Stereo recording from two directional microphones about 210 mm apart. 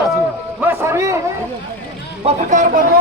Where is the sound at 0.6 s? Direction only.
10° right (ahead or behind).